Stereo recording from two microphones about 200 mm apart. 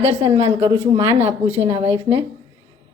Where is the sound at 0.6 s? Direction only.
20° right (ahead or behind).